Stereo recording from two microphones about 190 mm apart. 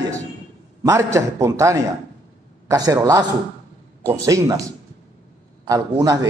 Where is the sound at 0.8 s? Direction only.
15° right (ahead or behind).